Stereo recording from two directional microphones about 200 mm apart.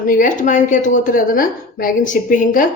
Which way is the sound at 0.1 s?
40° left (ahead or behind).